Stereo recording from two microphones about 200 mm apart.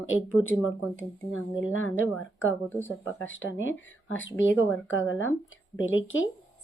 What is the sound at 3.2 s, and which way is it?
A woman's voice, 75° left (ahead or behind).